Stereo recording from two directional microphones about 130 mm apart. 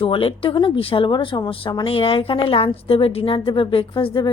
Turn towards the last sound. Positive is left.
turn(degrees=40)  # may be behind; listen again after turning